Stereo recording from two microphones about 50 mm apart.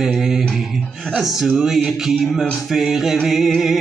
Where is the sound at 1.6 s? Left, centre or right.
Centre.